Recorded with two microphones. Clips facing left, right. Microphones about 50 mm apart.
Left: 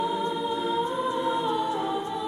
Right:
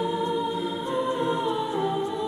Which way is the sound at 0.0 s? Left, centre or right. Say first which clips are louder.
Right 1 dB; left.